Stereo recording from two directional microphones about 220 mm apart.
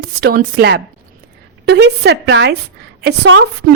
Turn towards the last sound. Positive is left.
turn(degrees=-50)  # may be behind; listen again after turning